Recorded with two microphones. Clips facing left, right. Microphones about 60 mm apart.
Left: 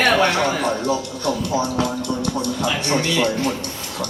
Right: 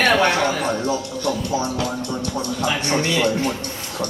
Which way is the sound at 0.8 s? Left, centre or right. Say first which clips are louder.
Left 1 dB; left.